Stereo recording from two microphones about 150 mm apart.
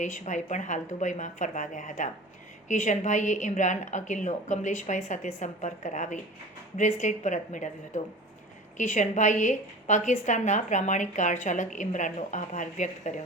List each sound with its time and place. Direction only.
0.0 s a woman's voice: 55° left (ahead or behind)